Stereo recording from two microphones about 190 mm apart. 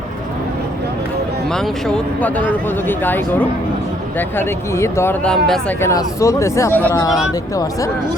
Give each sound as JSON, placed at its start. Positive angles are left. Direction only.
{"t": 1.5, "sound": "speech", "side_deg": 5}
{"t": 5.9, "sound": "speech", "side_deg": 15}